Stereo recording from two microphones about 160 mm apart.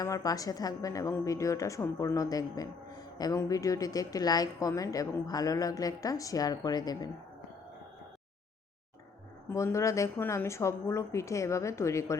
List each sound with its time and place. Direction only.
0.0 s a woman's voice: 20° left (ahead or behind)
9.5 s a woman's voice: 15° left (ahead or behind)